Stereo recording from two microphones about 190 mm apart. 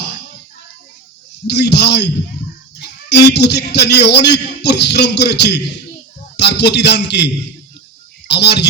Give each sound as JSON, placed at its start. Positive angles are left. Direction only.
{"t": 1.5, "sound": "a man's voice", "side_deg": 65}
{"t": 3.1, "sound": "a man's voice", "side_deg": 65}
{"t": 8.3, "sound": "a man's voice", "side_deg": 60}